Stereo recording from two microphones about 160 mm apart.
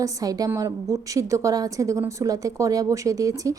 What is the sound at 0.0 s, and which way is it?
A woman's voice, 20° right (ahead or behind).